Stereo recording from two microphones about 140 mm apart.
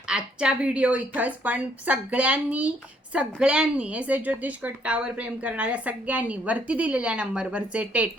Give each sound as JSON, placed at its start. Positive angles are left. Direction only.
{"t": 0.1, "sound": "a woman's voice", "side_deg": -5}